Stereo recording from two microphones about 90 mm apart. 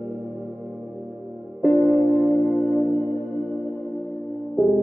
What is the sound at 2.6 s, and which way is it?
Music, 20° left (ahead or behind).